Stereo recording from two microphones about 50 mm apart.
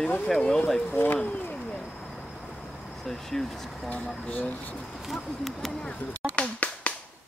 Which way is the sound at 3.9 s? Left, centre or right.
Left.